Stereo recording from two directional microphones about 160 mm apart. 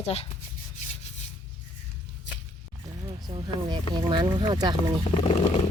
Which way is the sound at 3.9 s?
30° right (ahead or behind).